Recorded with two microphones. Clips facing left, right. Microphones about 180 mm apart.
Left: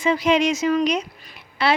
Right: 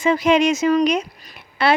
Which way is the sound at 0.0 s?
50° right (ahead or behind).